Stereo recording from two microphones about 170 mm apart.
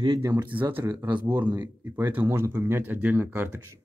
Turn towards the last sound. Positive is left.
turn(degrees=-10)  # may be behind; listen again after turning